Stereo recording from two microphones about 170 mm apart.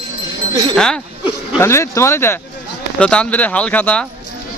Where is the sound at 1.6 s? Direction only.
15° left (ahead or behind).